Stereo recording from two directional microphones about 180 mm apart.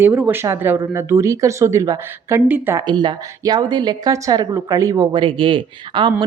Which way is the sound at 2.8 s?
25° right (ahead or behind).